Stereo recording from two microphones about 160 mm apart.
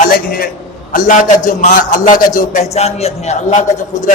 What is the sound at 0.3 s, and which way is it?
A man's voice, 70° left (ahead or behind).